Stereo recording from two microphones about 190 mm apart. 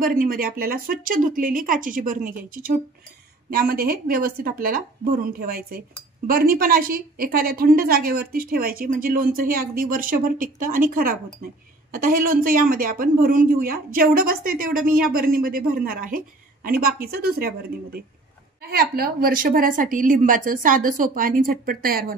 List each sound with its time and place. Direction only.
0.0 s a woman's voice: 50° right (ahead or behind)